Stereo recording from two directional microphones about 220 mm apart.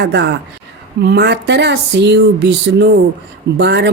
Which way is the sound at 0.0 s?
50° right (ahead or behind).